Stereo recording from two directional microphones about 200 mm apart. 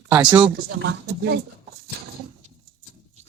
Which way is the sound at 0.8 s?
60° right (ahead or behind).